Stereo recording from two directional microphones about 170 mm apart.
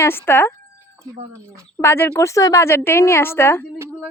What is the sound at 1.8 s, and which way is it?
Speech, 15° left (ahead or behind).